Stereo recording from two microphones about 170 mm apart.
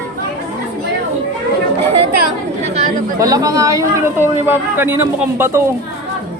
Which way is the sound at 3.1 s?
20° right (ahead or behind).